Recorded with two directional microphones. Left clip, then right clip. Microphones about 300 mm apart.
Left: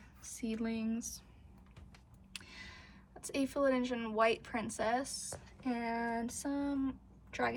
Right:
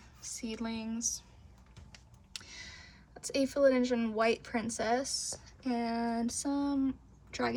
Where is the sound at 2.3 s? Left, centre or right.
Centre.